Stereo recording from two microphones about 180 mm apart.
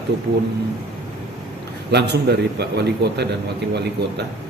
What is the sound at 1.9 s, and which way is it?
A man's voice, 65° right (ahead or behind).